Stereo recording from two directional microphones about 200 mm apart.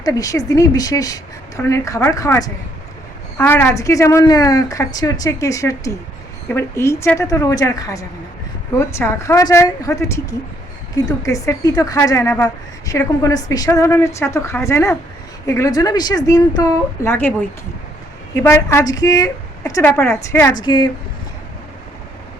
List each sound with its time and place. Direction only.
0.0 s a woman's voice: 15° left (ahead or behind)
18.3 s a woman's voice: 15° left (ahead or behind)